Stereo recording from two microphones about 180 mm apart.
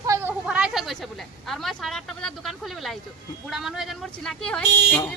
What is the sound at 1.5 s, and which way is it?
Speech, centre (ahead or behind).